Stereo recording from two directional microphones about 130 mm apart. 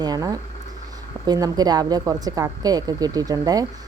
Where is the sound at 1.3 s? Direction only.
30° right (ahead or behind).